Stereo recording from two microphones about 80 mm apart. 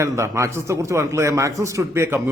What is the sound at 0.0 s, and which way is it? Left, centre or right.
A man's voice, right.